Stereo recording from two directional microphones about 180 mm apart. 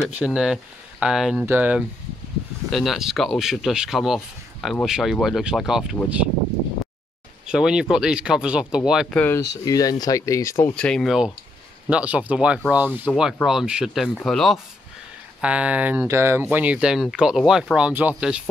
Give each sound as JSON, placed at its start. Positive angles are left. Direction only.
{"t": 0.2, "sound": "speech", "side_deg": -5}
{"t": 7.4, "sound": "speech", "side_deg": -5}
{"t": 9.4, "sound": "speech", "side_deg": 20}